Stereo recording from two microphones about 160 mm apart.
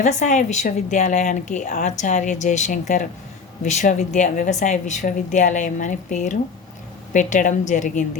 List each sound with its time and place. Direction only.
0.0 s a woman's voice: 50° left (ahead or behind)